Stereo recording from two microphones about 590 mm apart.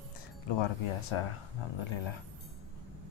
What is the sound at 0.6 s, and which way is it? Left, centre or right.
Speech, left.